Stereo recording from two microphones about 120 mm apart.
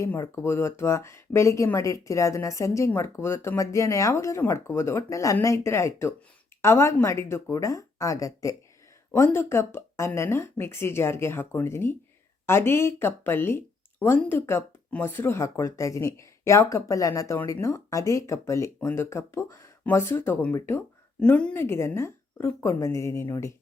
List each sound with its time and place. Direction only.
0.1 s speech: 20° left (ahead or behind)